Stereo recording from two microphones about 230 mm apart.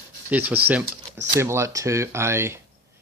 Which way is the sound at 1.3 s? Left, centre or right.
Centre.